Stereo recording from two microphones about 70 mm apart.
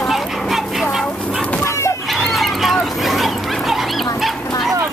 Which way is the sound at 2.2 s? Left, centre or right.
Centre.